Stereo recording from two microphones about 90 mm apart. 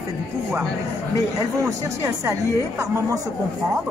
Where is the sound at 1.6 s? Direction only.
35° right (ahead or behind).